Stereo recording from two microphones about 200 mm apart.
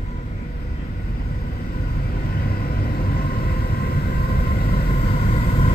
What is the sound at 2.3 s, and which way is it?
Vehicle, 50° left (ahead or behind).